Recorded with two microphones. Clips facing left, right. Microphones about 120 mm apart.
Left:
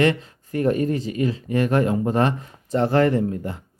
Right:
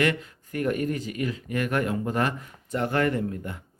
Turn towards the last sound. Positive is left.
turn(degrees=30)  # may be behind; listen again after turning